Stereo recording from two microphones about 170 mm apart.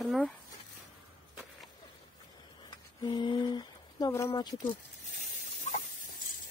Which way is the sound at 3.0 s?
25° left (ahead or behind).